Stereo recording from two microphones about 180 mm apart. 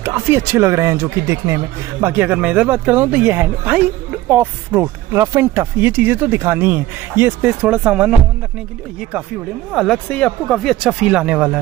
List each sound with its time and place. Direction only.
0.0 s speech: 15° right (ahead or behind)
9.7 s speech: centre (ahead or behind)